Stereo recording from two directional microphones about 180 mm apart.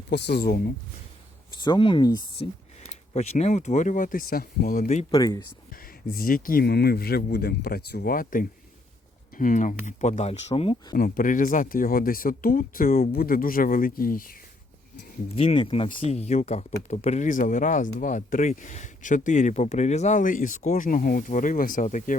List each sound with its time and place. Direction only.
0.1 s speech: 65° left (ahead or behind)
1.6 s speech: 25° left (ahead or behind)
3.1 s speech: 40° left (ahead or behind); by 4.9 s 55° left (ahead or behind)
5.1 s speech: 20° left (ahead or behind)
6.1 s speech: 50° left (ahead or behind); by 10.8 s 30° left (ahead or behind)
10.9 s speech: 50° left (ahead or behind)
15.4 s speech: 30° left (ahead or behind); by 22.2 s 45° left (ahead or behind)